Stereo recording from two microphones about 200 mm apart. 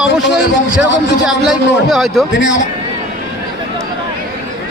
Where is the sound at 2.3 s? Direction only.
70° left (ahead or behind).